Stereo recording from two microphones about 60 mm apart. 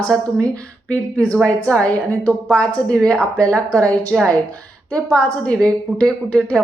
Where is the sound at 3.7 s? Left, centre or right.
Right.